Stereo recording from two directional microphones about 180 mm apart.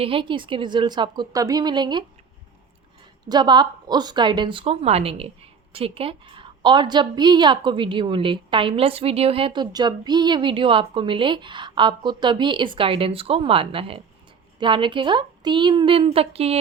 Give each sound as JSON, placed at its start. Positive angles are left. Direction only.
{"t": 0.0, "sound": "a woman's voice", "side_deg": -30}
{"t": 3.2, "sound": "a woman's voice", "side_deg": -25}